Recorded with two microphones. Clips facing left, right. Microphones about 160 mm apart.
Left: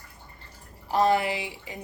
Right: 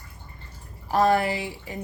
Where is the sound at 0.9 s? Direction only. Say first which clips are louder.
Right 2 dB; 50° right (ahead or behind).